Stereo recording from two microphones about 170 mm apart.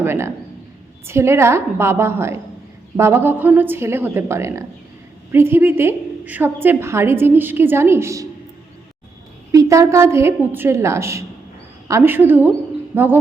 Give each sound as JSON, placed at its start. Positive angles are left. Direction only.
{"t": 0.0, "sound": "a woman's voice", "side_deg": -15}
{"t": 9.5, "sound": "a woman's voice", "side_deg": -20}